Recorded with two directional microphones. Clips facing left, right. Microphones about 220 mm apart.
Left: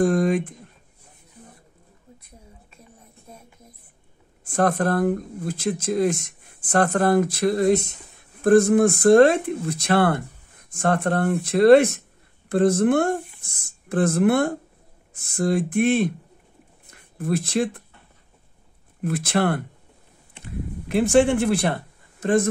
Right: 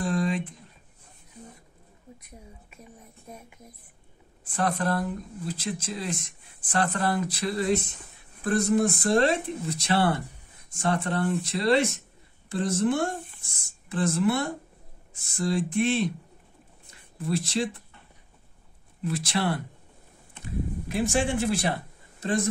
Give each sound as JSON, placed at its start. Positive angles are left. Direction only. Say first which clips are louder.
{"t": 0.0, "sound": "a sound", "louder": "left 8 dB", "side_deg": 50}
{"t": 4.5, "sound": "speech", "louder": "left 6 dB", "side_deg": 50}
{"t": 18.9, "sound": "speech", "louder": "left 6 dB", "side_deg": 55}
{"t": 20.9, "sound": "speech", "louder": "left 9 dB", "side_deg": 60}